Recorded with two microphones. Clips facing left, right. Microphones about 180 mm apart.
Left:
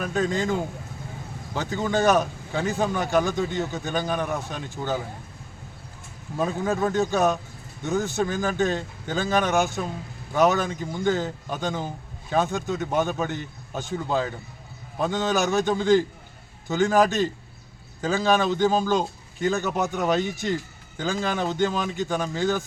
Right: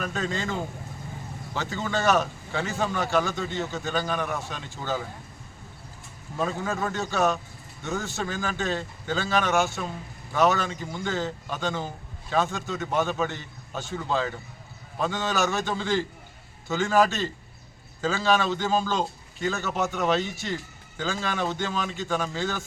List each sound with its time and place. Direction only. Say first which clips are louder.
0.1 s a man's voice: left 5 dB; 15° left (ahead or behind)
6.4 s a man's voice: left 4 dB; 15° left (ahead or behind)